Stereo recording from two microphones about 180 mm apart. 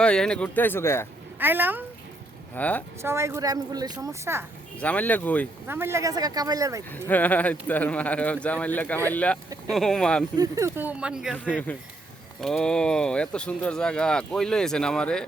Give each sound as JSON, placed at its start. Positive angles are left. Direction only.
{"t": 0.0, "sound": "speech", "side_deg": 5}
{"t": 1.4, "sound": "a woman's voice", "side_deg": -10}
{"t": 2.6, "sound": "speech", "side_deg": 10}
{"t": 3.0, "sound": "a woman's voice", "side_deg": -15}
{"t": 4.8, "sound": "speech", "side_deg": 10}
{"t": 5.6, "sound": "speech", "side_deg": -10}
{"t": 7.1, "sound": "speech", "side_deg": 10}
{"t": 10.3, "sound": "a woman's voice", "side_deg": -20}
{"t": 12.4, "sound": "speech", "side_deg": 5}